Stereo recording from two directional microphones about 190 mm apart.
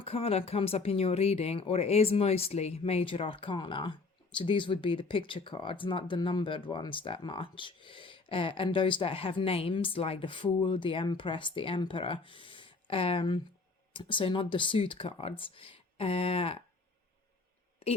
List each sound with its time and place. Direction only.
0.0 s speech: 30° left (ahead or behind)